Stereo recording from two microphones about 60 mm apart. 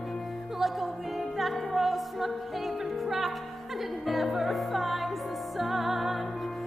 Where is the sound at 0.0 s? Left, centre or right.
Centre.